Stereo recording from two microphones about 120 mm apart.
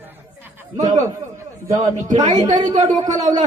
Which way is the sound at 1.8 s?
85° right.